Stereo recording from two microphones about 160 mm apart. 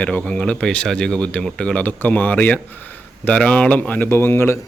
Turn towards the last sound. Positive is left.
turn(degrees=15)  # may be behind; listen again after turning